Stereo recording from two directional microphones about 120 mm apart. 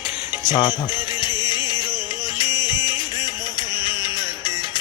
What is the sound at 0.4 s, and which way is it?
Music, 40° left (ahead or behind).